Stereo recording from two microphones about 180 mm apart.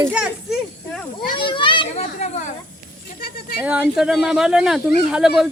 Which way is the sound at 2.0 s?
40° left (ahead or behind).